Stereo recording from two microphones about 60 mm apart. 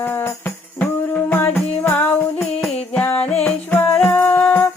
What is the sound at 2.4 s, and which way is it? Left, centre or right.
Music, centre.